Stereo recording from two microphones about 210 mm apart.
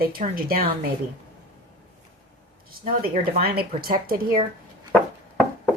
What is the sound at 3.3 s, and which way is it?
Speech, 45° right (ahead or behind).